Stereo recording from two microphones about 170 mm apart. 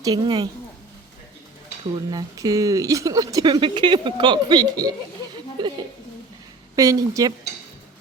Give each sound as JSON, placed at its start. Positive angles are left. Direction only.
{"t": 0.0, "sound": "speech", "side_deg": -25}
{"t": 2.0, "sound": "speech", "side_deg": -20}
{"t": 6.7, "sound": "speech", "side_deg": -20}